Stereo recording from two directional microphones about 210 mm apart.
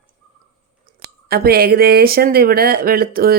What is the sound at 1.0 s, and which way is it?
A woman's voice, 45° right (ahead or behind).